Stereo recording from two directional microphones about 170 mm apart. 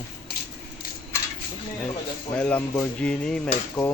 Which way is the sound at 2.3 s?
5° left (ahead or behind).